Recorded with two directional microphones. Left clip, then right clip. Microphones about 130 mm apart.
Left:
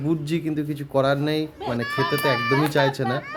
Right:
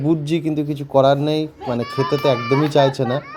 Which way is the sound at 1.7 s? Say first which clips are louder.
Right 3 dB; 30° left (ahead or behind).